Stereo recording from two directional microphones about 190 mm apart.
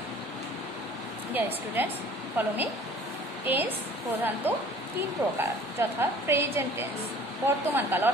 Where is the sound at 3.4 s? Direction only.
10° right (ahead or behind).